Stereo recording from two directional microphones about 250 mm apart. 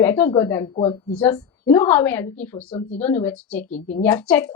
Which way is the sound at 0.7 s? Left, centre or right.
Left.